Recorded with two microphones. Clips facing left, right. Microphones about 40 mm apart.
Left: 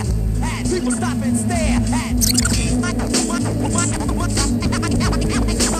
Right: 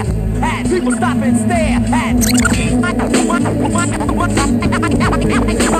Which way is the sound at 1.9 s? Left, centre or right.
Right.